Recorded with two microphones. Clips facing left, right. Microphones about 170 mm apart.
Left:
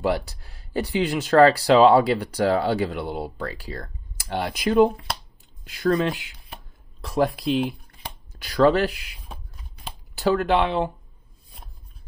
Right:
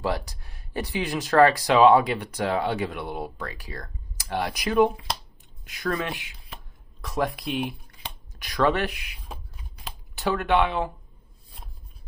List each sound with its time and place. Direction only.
0.0 s speech: 30° left (ahead or behind)
6.5 s a sound: 30° left (ahead or behind)
8.3 s speech: 30° left (ahead or behind)
10.1 s speech: 30° left (ahead or behind)